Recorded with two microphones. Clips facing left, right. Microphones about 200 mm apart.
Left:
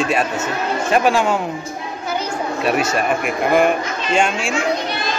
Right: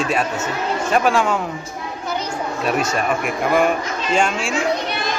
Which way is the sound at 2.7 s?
5° left (ahead or behind).